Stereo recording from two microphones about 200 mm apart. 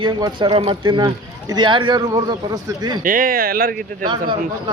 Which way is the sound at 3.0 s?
45° right (ahead or behind).